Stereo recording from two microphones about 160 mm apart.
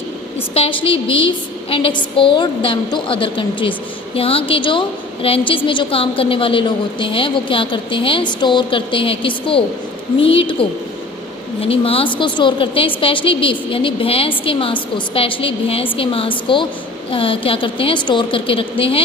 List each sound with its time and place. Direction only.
0.5 s a woman's voice: 35° left (ahead or behind)